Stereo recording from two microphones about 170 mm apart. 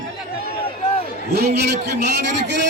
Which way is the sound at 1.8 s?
85° right.